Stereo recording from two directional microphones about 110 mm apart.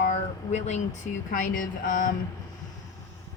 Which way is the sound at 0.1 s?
90° left.